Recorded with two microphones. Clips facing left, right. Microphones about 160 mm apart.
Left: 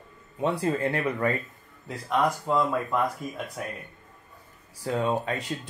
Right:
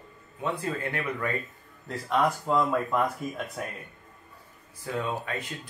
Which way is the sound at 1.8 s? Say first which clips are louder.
Even; centre (ahead or behind).